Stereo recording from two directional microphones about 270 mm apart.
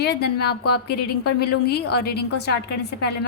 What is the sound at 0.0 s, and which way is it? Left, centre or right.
Speech, left.